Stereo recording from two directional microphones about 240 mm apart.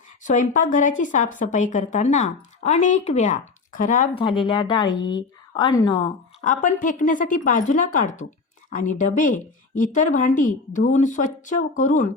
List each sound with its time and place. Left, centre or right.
0.2 s a woman's voice: left
6.4 s speech: left